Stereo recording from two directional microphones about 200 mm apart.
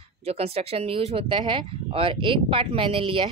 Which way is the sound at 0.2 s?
30° right (ahead or behind).